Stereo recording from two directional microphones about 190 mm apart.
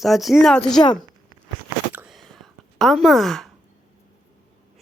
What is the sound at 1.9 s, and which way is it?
Whispering, 10° right (ahead or behind).